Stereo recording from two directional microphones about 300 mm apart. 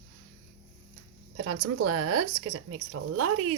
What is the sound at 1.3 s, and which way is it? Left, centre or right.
Speech, right.